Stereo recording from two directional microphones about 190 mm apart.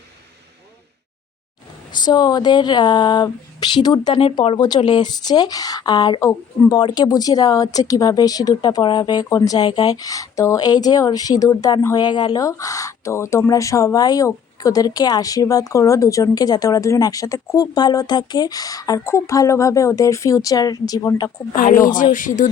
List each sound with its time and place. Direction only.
1.9 s speech: 20° left (ahead or behind)
21.5 s speech: 45° left (ahead or behind)